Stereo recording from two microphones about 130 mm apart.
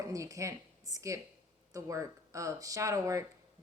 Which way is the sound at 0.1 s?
25° right (ahead or behind).